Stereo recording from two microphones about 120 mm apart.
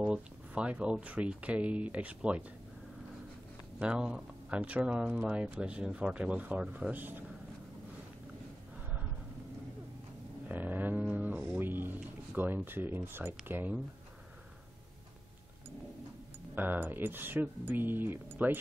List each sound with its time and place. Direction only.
0.0 s speech: 10° right (ahead or behind)
3.8 s speech: 10° right (ahead or behind)
10.5 s a sound: 15° right (ahead or behind)
13.5 s speech: 15° right (ahead or behind)
16.5 s speech: 15° right (ahead or behind)